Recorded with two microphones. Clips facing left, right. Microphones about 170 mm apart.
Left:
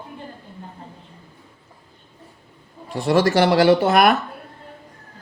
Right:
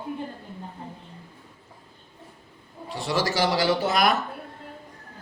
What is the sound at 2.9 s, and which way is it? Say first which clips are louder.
Speech: left 9 dB; 55° left (ahead or behind).